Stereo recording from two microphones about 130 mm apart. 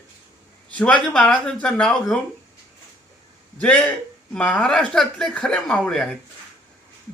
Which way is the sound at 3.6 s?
10° left (ahead or behind).